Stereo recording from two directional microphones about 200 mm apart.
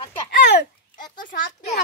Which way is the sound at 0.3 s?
50° left (ahead or behind).